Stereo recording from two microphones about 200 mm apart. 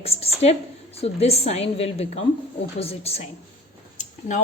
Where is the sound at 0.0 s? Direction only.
30° left (ahead or behind).